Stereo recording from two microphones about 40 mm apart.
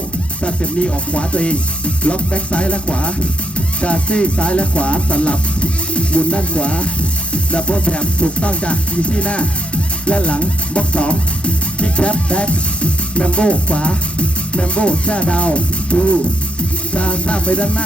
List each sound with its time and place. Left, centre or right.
0.4 s music: left
10.1 s speech: left
16.9 s music: left